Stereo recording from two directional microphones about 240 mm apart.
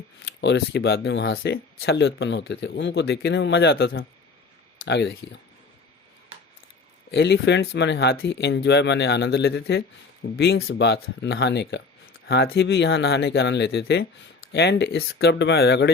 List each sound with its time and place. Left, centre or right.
0.3 s speech: left
7.1 s speech: left